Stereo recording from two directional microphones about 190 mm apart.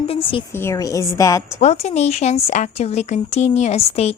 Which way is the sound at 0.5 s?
15° left (ahead or behind).